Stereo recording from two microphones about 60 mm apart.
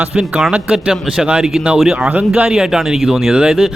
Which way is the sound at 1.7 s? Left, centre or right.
Centre.